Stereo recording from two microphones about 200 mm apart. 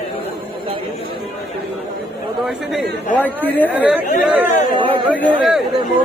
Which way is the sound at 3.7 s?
5° right (ahead or behind).